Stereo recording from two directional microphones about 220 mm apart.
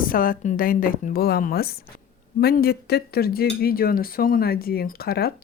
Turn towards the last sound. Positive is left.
turn(degrees=45)  # may be behind; listen again after turning